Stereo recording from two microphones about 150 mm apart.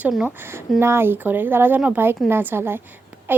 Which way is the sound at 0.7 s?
15° right (ahead or behind).